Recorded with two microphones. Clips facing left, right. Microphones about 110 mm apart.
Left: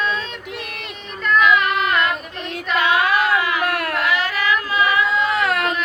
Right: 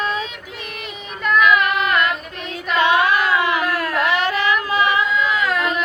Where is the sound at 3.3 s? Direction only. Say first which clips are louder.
Right 1 dB; 25° right (ahead or behind).